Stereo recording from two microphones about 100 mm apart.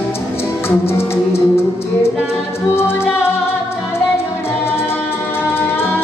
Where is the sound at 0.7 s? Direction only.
25° left (ahead or behind).